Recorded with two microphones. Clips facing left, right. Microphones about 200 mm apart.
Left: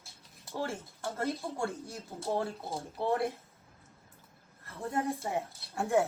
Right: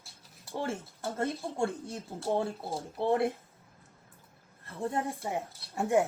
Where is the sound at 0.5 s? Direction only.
20° right (ahead or behind).